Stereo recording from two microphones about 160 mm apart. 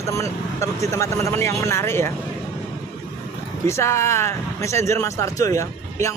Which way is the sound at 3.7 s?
15° left (ahead or behind).